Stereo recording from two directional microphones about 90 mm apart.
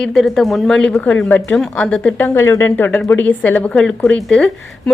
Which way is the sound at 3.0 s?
20° left (ahead or behind).